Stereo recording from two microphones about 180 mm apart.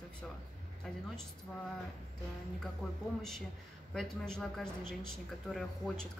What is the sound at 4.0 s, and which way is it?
Speech, 5° left (ahead or behind).